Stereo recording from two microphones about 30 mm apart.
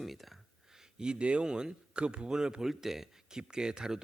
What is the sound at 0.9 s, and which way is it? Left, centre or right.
Speech, right.